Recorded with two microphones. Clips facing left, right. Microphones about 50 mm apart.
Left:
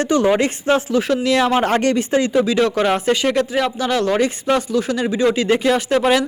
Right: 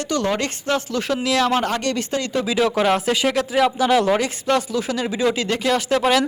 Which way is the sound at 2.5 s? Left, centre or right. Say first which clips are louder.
Left 2 dB; centre.